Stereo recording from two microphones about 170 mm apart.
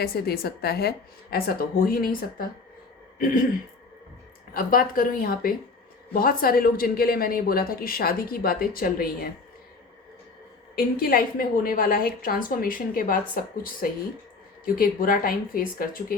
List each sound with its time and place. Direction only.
0.0 s speech: 65° left (ahead or behind)
4.5 s speech: 55° left (ahead or behind)
10.8 s speech: 60° left (ahead or behind)